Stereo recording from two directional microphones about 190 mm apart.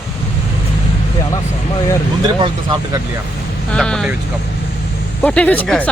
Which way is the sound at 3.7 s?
5° left (ahead or behind).